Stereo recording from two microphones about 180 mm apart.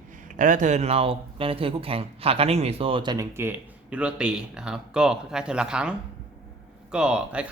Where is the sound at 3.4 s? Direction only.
10° right (ahead or behind).